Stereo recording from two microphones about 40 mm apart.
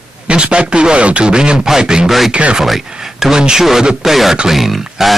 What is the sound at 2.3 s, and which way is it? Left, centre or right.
Speech, right.